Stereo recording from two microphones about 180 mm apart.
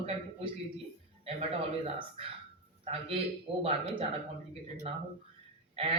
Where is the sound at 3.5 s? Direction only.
30° right (ahead or behind).